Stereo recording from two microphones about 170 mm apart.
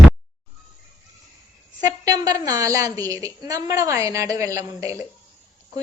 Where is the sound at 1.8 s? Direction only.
20° right (ahead or behind).